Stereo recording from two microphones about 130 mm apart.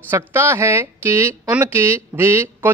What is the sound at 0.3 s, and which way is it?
Speech, 20° right (ahead or behind).